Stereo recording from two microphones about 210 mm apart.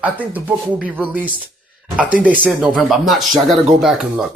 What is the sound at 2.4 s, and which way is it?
Speech, centre (ahead or behind).